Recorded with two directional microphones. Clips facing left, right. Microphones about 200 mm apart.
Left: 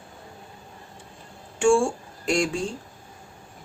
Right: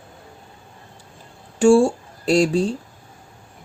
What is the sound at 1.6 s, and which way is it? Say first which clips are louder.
Speech: right 6 dB; 40° right (ahead or behind).